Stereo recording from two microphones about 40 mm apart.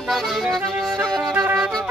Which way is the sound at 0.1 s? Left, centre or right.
Centre.